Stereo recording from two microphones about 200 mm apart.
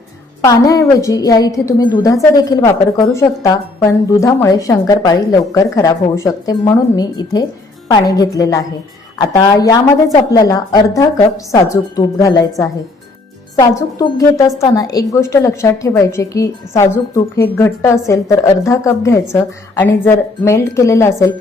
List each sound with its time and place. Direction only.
0.4 s a woman's voice: 15° left (ahead or behind)